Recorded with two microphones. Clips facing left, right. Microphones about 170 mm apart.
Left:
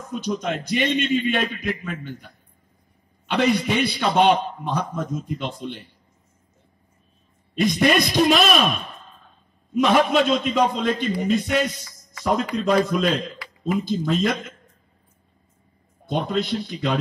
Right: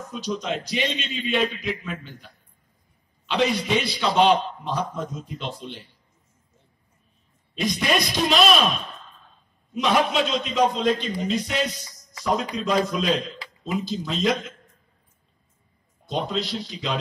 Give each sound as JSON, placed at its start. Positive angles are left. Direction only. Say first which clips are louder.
{"t": 0.1, "sound": "a man's voice", "louder": "left 3 dB", "side_deg": 55}
{"t": 7.5, "sound": "a man's voice", "louder": "left 5 dB", "side_deg": 55}
{"t": 16.1, "sound": "a man's voice", "louder": "left 3 dB", "side_deg": 55}